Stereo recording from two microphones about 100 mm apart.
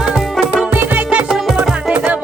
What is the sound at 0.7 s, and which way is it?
Music, 20° right (ahead or behind).